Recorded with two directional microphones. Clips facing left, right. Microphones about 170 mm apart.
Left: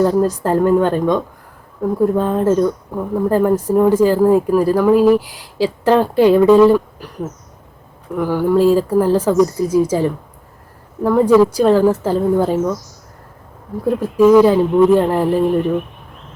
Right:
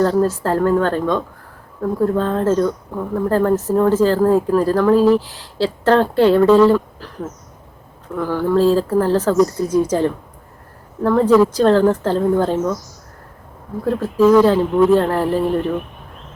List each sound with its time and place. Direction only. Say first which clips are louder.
0.0 s speech: left 1 dB; 15° left (ahead or behind)
8.1 s speech: left 2 dB; 15° left (ahead or behind)
13.8 s speech: left 2 dB; 15° left (ahead or behind)